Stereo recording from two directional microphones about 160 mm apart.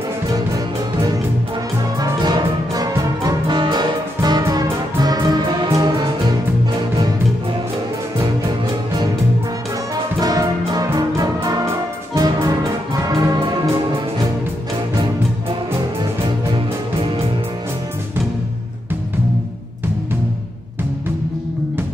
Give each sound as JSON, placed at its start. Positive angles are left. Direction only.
{"t": 2.0, "sound": "music", "side_deg": -25}
{"t": 10.2, "sound": "music", "side_deg": -25}